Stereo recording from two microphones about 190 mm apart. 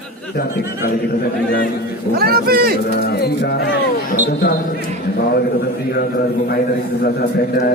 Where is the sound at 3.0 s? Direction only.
55° left (ahead or behind).